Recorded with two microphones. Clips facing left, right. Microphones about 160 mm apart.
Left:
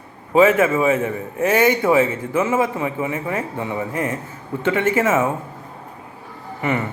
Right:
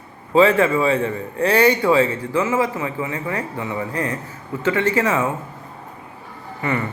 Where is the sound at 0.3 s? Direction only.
20° left (ahead or behind).